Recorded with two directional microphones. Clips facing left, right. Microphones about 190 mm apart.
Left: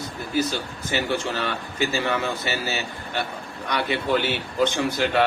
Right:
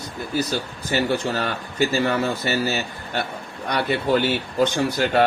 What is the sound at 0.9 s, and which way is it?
Speech, 40° right (ahead or behind).